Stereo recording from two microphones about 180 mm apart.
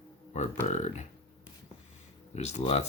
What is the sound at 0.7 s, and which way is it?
Speech, 40° left (ahead or behind).